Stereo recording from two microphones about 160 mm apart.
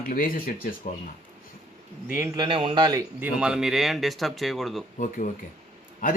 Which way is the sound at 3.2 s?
5° right (ahead or behind).